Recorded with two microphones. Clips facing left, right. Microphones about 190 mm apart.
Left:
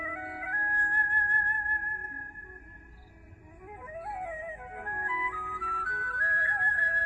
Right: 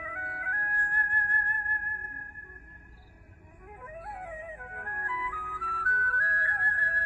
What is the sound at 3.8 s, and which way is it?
Music, 20° left (ahead or behind).